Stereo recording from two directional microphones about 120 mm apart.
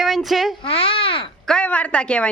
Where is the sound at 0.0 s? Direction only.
Centre (ahead or behind).